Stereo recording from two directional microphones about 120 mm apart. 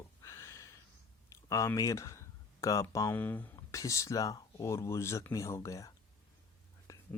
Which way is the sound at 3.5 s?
25° left (ahead or behind).